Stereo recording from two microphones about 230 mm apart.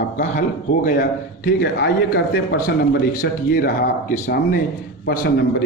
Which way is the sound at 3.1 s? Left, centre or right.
Left.